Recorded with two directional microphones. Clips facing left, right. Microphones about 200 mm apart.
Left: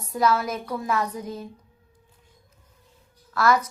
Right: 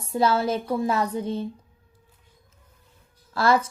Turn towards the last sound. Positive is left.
turn(degrees=-30)  # may be behind; listen again after turning